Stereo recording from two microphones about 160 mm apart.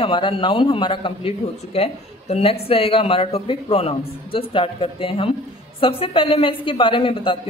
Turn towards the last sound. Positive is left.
turn(degrees=35)  # may be behind; listen again after turning